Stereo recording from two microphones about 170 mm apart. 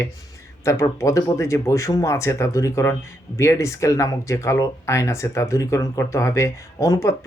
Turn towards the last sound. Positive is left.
turn(degrees=20)  # may be behind; listen again after turning